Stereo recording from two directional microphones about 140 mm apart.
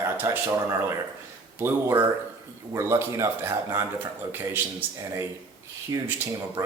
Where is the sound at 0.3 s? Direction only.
20° right (ahead or behind).